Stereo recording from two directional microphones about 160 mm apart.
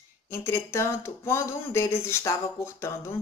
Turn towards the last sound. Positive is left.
turn(degrees=15)  # may be behind; listen again after turning